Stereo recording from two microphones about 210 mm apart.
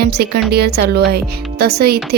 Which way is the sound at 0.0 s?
50° right (ahead or behind).